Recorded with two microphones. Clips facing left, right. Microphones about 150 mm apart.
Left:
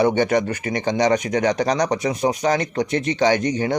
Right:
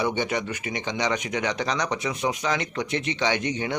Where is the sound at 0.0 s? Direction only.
50° left (ahead or behind).